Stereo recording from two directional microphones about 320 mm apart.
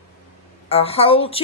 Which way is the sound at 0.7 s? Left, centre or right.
Centre.